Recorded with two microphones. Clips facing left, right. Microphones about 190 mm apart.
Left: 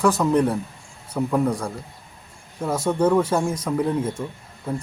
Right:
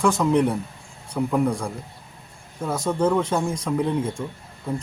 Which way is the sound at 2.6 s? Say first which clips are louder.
Left 2 dB; 5° left (ahead or behind).